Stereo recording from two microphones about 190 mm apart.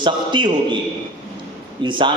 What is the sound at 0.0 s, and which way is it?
Speech, 25° right (ahead or behind).